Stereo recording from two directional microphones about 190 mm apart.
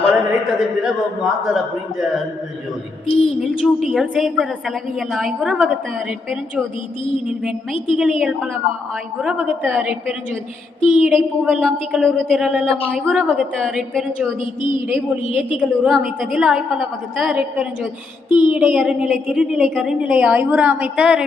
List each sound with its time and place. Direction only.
0.1 s a woman's voice: 5° right (ahead or behind)
3.1 s a sound: 30° left (ahead or behind)
3.4 s a woman's voice: centre (ahead or behind)
7.3 s a woman's voice: 5° right (ahead or behind)
14.8 s a woman's voice: 10° right (ahead or behind)
15.5 s a woman's voice: centre (ahead or behind)
18.3 s speech: 25° left (ahead or behind)
18.5 s a woman's voice: centre (ahead or behind)